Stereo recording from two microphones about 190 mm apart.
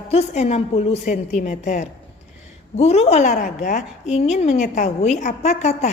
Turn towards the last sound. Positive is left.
turn(degrees=35)  # may be behind; listen again after turning